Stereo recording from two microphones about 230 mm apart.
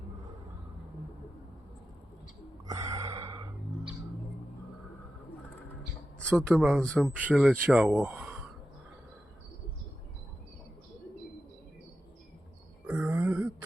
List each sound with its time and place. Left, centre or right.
2.6 s gasp: centre
6.1 s speech: centre
12.9 s a sound: centre